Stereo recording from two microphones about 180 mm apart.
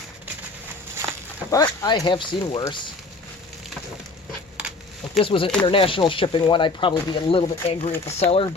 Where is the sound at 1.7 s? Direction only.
20° left (ahead or behind).